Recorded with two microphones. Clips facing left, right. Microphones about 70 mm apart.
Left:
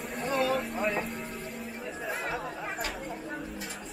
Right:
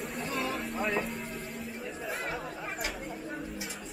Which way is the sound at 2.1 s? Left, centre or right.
Centre.